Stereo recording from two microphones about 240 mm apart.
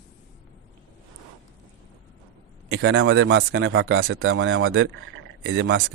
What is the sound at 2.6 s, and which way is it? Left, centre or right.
A man's voice, right.